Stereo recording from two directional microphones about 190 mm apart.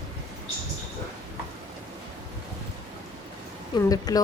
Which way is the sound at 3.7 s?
20° left (ahead or behind).